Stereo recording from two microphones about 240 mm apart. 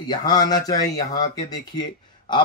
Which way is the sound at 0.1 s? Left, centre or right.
Centre.